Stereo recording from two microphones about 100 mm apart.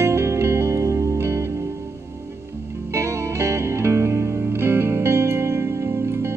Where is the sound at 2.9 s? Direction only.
30° right (ahead or behind).